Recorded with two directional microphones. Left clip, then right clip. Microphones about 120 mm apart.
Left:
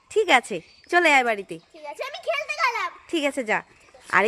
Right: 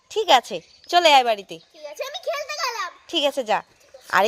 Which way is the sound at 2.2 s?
15° left (ahead or behind).